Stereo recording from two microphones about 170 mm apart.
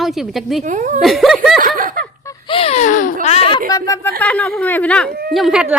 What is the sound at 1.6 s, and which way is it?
Snicker, 55° right (ahead or behind).